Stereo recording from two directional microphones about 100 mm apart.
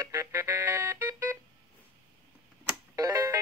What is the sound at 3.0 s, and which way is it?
Music, 35° right (ahead or behind).